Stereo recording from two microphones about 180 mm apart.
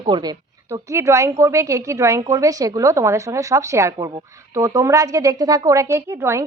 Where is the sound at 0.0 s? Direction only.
25° right (ahead or behind).